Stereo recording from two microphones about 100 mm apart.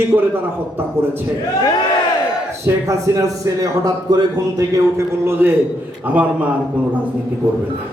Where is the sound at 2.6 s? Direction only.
30° right (ahead or behind).